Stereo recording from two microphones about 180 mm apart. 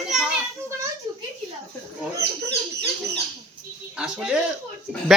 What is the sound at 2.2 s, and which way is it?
Speech, 70° right (ahead or behind).